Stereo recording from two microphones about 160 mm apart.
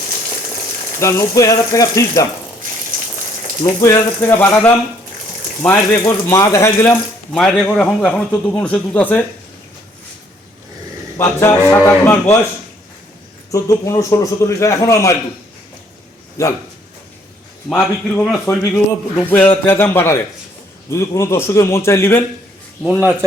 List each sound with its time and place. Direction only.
0.9 s a man's voice: 20° left (ahead or behind)
2.9 s rain on surface: 60° right (ahead or behind)
3.6 s a man's voice: 20° left (ahead or behind)
6.1 s speech: 20° left (ahead or behind)
7.3 s speech: 5° left (ahead or behind)
11.2 s speech: 15° left (ahead or behind)
13.5 s a man's voice: 20° left (ahead or behind)
17.7 s a man's voice: centre (ahead or behind)
18.3 s speech: 15° left (ahead or behind)
22.9 s speech: 5° right (ahead or behind)